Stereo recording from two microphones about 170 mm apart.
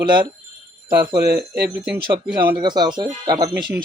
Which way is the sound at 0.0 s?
25° right (ahead or behind).